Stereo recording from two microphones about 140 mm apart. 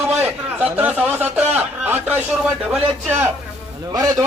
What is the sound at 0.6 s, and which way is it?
Speech, 10° right (ahead or behind).